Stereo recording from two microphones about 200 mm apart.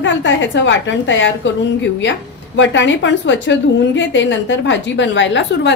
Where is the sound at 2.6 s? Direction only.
65° left (ahead or behind).